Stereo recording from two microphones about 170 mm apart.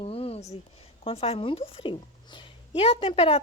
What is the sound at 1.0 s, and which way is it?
A woman's voice, 35° left (ahead or behind).